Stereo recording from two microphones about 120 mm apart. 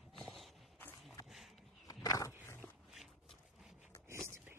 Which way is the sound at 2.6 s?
10° left (ahead or behind).